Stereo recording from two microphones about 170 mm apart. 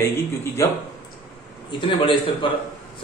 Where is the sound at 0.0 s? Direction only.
15° left (ahead or behind).